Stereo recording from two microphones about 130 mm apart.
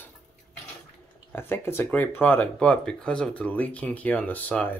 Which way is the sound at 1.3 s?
15° left (ahead or behind).